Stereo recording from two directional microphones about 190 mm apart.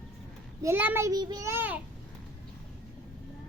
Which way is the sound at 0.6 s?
10° right (ahead or behind).